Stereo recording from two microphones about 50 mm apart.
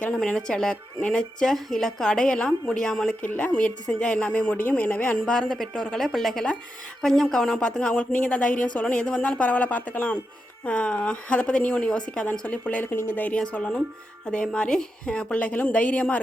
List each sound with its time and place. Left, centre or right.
0.2 s a woman's voice: centre
3.3 s speech: left
5.2 s a woman's voice: centre
7.6 s speech: left